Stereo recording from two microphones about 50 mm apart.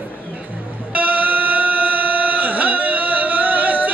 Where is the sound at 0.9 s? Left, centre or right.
Right.